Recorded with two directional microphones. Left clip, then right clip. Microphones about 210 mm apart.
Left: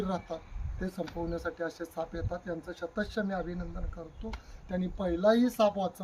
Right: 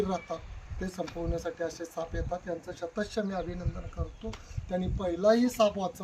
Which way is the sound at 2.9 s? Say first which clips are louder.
Right 1 dB; 15° left (ahead or behind).